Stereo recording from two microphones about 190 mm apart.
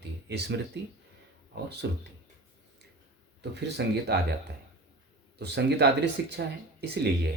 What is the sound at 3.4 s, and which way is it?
Speech, 65° right (ahead or behind).